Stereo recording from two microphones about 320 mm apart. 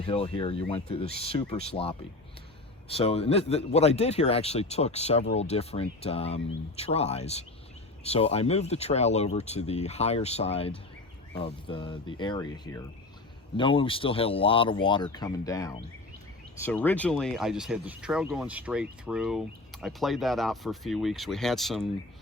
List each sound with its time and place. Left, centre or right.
0.0 s speech: centre